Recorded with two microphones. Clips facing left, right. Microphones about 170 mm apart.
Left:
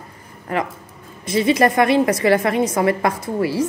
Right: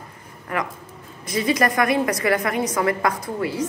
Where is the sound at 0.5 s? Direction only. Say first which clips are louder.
Left 4 dB; 30° left (ahead or behind).